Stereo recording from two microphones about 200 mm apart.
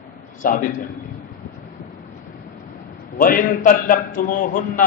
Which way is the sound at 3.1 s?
45° left (ahead or behind).